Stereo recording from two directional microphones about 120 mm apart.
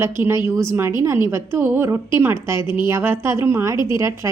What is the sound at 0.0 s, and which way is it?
A woman's voice, 20° right (ahead or behind).